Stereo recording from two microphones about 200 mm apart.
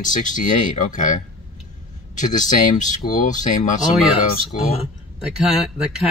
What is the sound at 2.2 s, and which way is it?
Speech, 40° left (ahead or behind).